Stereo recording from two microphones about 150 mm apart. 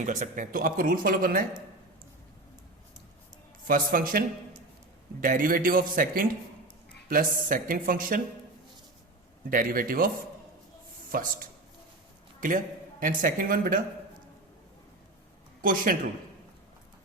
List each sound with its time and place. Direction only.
0.0 s speech: 55° right (ahead or behind)
3.7 s speech: 70° right (ahead or behind)
5.2 s speech: 65° right (ahead or behind)
9.5 s speech: 70° right (ahead or behind)
11.1 s speech: 70° right (ahead or behind)
15.6 s speech: 70° right (ahead or behind)